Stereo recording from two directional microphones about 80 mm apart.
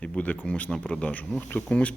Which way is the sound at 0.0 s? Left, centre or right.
Centre.